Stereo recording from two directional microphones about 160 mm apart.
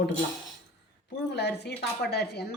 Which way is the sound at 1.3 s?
90° left.